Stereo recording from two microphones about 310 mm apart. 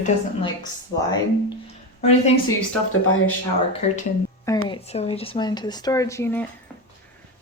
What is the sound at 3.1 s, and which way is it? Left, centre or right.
Speech, left.